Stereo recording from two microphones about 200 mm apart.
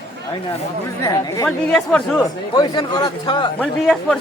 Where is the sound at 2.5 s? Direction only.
20° left (ahead or behind).